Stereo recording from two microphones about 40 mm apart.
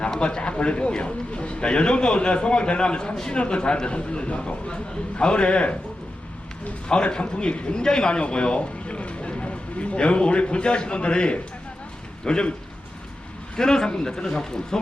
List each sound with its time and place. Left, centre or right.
0.1 s a man's voice: left
6.8 s a man's voice: left
13.6 s speech: centre